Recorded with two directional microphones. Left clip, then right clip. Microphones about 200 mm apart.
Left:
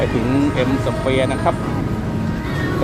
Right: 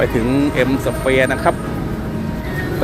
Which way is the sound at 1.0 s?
20° right (ahead or behind).